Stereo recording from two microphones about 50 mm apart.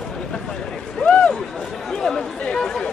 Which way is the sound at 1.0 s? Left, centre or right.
Left.